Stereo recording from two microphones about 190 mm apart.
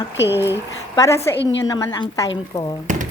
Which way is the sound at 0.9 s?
15° left (ahead or behind).